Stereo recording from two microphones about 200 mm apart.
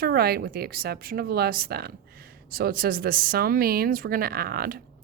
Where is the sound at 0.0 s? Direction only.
50° right (ahead or behind).